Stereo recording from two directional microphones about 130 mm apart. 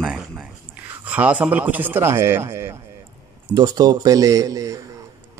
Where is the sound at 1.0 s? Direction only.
10° right (ahead or behind).